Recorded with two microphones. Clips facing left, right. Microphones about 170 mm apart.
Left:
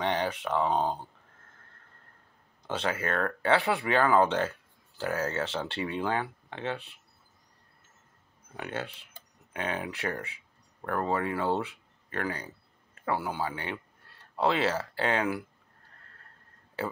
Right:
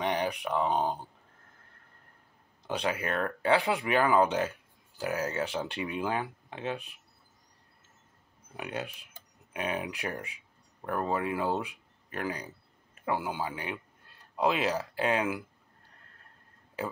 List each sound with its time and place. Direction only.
0.0 s speech: 15° right (ahead or behind)
2.6 s speech: 15° right (ahead or behind)
8.5 s speech: 15° right (ahead or behind)